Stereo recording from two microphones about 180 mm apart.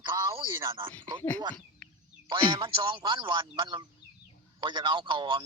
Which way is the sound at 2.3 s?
25° right (ahead or behind).